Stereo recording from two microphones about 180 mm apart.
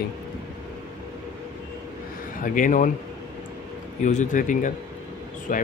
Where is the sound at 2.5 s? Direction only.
45° left (ahead or behind).